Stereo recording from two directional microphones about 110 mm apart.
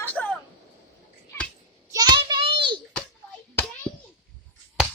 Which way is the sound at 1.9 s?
40° right (ahead or behind).